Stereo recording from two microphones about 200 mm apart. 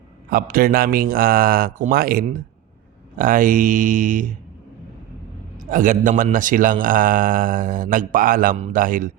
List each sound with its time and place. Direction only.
0.3 s a man's voice: 45° right (ahead or behind)
5.7 s a man's voice: 40° right (ahead or behind)